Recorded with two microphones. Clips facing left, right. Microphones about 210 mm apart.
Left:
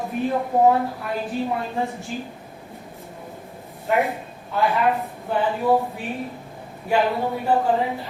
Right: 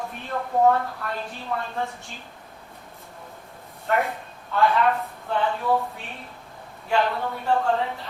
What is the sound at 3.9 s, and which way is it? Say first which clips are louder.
Speech: left 3 dB; 15° left (ahead or behind).